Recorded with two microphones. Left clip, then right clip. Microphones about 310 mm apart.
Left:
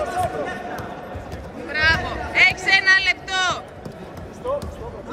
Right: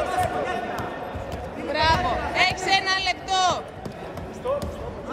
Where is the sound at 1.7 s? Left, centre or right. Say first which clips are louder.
Left 2 dB; centre.